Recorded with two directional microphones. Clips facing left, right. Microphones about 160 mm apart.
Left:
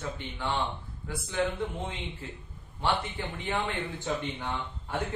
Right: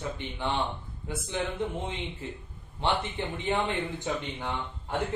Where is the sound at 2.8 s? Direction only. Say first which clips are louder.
Right 1 dB; 20° right (ahead or behind).